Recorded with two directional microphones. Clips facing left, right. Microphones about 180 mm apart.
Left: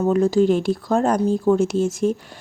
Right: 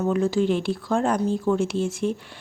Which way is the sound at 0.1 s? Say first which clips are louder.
Left 6 dB; 40° left (ahead or behind).